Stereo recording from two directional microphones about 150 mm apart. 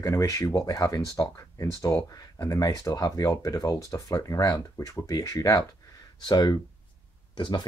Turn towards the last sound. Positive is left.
turn(degrees=30)  # may be behind; listen again after turning